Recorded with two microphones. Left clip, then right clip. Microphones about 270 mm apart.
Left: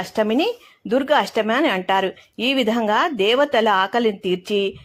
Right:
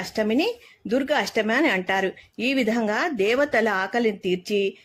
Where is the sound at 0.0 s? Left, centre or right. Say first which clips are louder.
Left 4 dB; centre.